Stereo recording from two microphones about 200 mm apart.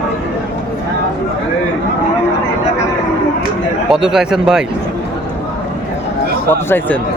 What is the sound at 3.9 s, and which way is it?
Speech, 5° right (ahead or behind).